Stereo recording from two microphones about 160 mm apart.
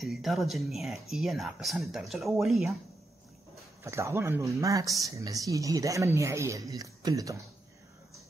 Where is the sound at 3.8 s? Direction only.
15° right (ahead or behind).